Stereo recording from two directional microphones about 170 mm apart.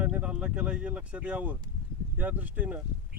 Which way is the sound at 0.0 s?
5° right (ahead or behind).